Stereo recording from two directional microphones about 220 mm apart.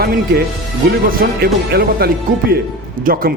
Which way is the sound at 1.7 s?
45° right (ahead or behind).